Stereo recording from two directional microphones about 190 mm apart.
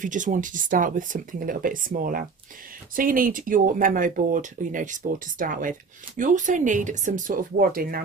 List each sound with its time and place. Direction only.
0.0 s speech: 40° right (ahead or behind)